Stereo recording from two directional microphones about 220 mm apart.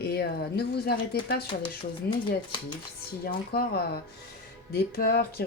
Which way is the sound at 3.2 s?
45° left (ahead or behind).